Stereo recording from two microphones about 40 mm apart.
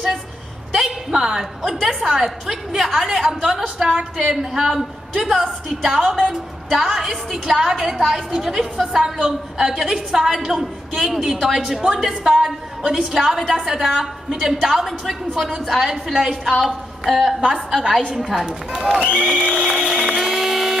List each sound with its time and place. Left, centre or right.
0.7 s a woman's voice: centre
3.6 s a woman's voice: right
4.4 s a woman's voice: centre
12.4 s a woman's voice: centre
18.4 s a woman's voice: centre
19.9 s a sound: centre